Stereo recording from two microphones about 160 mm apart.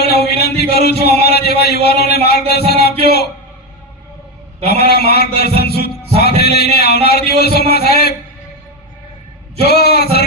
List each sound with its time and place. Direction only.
0.0 s a sound: 85° left
1.2 s a man's voice: 85° left
4.6 s a man's voice: 85° left
5.5 s music: 80° left
6.4 s a man's voice: 90° left
9.6 s a sound: 80° left